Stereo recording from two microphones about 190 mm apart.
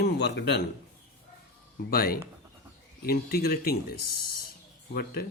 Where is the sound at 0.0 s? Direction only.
60° left (ahead or behind).